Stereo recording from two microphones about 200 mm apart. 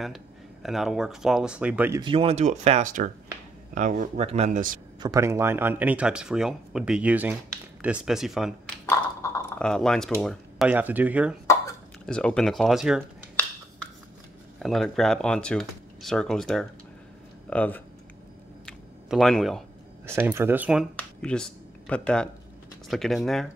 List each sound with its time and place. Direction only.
0.0 s speech: centre (ahead or behind)
2.0 s speech: 25° right (ahead or behind)
5.0 s speech: 15° right (ahead or behind)
8.8 s ping: 15° left (ahead or behind)
10.2 s speech: 5° right (ahead or behind)
12.1 s speech: 5° left (ahead or behind)
14.6 s speech: centre (ahead or behind)
19.0 s speech: centre (ahead or behind)
20.1 s speech: 10° right (ahead or behind)
20.9 s speech: 5° left (ahead or behind)